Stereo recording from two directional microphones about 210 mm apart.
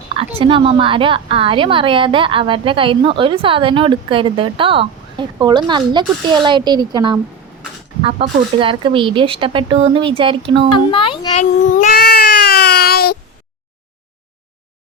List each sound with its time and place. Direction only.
0.2 s a woman's voice: 25° right (ahead or behind)
8.2 s a woman's voice: 25° right (ahead or behind)
10.8 s a child's voice: 25° left (ahead or behind)
11.8 s a sound: 45° left (ahead or behind)